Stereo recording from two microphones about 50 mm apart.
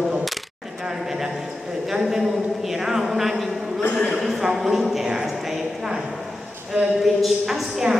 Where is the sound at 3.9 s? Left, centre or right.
Left.